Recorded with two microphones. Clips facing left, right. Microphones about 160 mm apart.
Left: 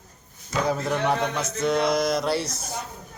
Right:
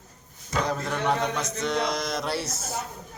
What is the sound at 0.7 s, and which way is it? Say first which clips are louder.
Mantra: left 4 dB; 10° left (ahead or behind).